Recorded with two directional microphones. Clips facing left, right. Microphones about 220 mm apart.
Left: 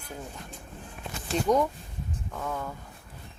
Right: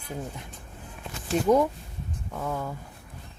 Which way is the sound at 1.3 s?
10° right (ahead or behind).